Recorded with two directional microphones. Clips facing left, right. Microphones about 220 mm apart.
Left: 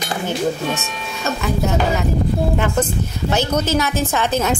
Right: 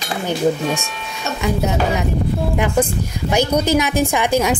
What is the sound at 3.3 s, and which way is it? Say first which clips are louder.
Speech: right 3 dB; 15° right (ahead or behind).